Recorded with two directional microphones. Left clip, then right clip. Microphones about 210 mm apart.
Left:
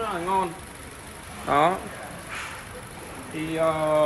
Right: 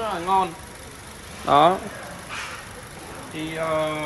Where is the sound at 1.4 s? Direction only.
50° right (ahead or behind).